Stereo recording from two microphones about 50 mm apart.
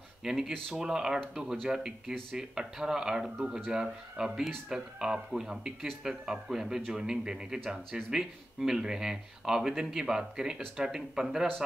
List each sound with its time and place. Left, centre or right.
0.2 s speech: centre